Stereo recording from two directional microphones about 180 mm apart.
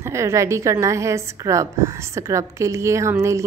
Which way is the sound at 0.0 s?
15° right (ahead or behind).